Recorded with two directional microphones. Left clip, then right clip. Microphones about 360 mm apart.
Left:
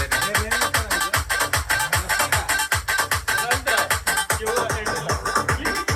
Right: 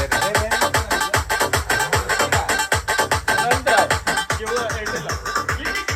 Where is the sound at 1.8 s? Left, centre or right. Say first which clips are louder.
Right 2 dB; centre.